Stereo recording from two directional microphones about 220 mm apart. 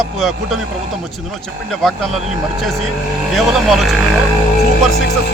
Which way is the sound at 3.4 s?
Centre (ahead or behind).